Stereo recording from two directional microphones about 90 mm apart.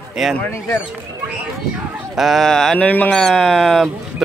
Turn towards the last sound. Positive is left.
turn(degrees=0)  # may be behind; listen again after turning